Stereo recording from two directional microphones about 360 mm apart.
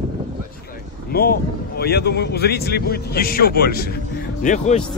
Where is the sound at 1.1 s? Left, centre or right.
Left.